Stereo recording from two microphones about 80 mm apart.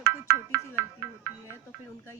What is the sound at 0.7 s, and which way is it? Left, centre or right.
Music, right.